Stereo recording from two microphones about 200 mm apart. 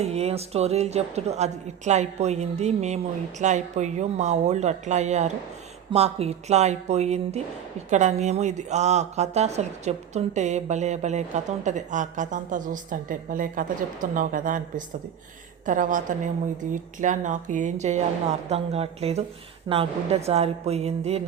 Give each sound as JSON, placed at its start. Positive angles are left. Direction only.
{"t": 0.0, "sound": "speech", "side_deg": -30}